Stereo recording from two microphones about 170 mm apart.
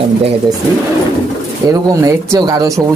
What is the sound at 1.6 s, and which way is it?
Speech, 20° right (ahead or behind).